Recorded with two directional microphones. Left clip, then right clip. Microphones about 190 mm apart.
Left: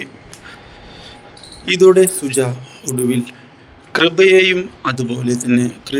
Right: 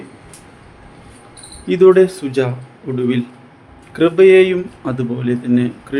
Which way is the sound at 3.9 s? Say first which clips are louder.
Right 1 dB; 55° left (ahead or behind).